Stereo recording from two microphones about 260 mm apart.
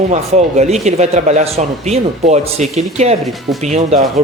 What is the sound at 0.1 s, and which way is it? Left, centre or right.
Speech, right.